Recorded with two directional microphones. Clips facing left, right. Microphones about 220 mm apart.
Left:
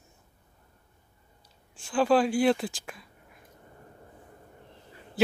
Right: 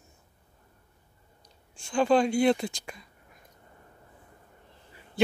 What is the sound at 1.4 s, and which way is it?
Speech, 5° left (ahead or behind).